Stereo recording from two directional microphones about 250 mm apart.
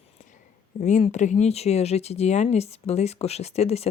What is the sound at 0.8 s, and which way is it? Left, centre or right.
Speech, left.